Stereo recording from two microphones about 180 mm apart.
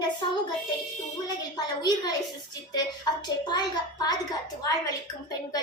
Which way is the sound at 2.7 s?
25° left (ahead or behind).